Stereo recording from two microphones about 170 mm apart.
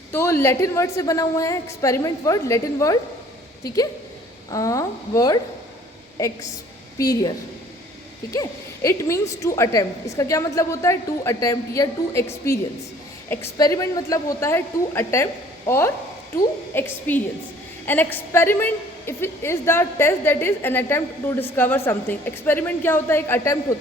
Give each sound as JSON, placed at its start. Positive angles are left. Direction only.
{"t": 0.1, "sound": "a woman's voice", "side_deg": 15}
{"t": 4.5, "sound": "a woman's voice", "side_deg": 20}
{"t": 7.0, "sound": "a woman's voice", "side_deg": 20}